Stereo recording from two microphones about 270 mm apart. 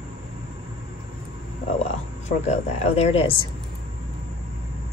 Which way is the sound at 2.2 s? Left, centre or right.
Left.